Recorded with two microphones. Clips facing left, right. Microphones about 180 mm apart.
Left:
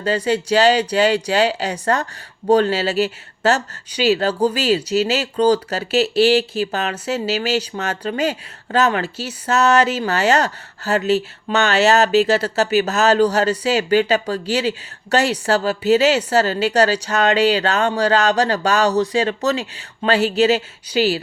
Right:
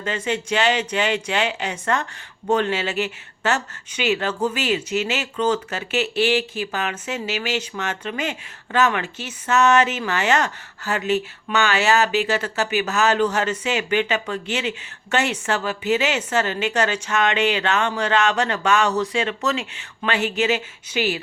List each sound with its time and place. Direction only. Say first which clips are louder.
0.0 s speech: left 6 dB; 35° left (ahead or behind)